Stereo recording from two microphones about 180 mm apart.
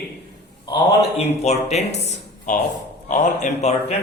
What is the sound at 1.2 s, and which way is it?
Speech, 35° left (ahead or behind).